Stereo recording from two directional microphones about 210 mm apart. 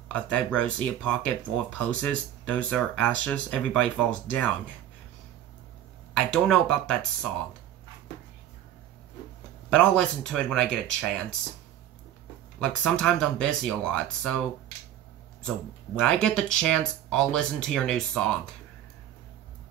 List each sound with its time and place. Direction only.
0.1 s speech: 5° left (ahead or behind)
6.1 s speech: 5° left (ahead or behind)
9.7 s speech: 5° left (ahead or behind)
12.5 s speech: 5° left (ahead or behind)
16.0 s speech: 5° left (ahead or behind)